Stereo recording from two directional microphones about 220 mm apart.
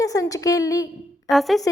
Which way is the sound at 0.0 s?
15° left (ahead or behind).